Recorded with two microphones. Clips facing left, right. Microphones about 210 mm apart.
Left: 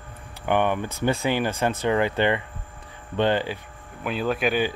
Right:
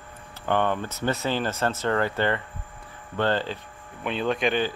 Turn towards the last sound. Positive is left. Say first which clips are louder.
# left 1 dB
turn(degrees=5)  # may be behind; listen again after turning